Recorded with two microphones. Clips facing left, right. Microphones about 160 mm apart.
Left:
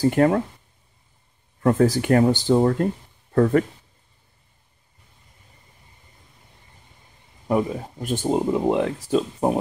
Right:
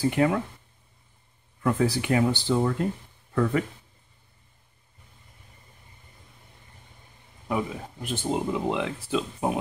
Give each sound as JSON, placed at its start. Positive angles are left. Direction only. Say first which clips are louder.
{"t": 0.0, "sound": "speech", "louder": "left 5 dB", "side_deg": 45}
{"t": 1.6, "sound": "speech", "louder": "left 6 dB", "side_deg": 45}
{"t": 7.4, "sound": "speech", "louder": "left 7 dB", "side_deg": 45}